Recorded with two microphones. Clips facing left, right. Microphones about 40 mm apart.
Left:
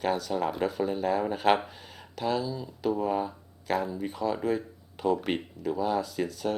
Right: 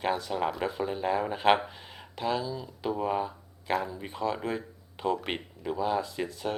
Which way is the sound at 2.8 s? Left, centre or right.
Right.